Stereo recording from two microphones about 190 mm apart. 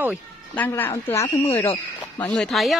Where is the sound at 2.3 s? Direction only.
Centre (ahead or behind).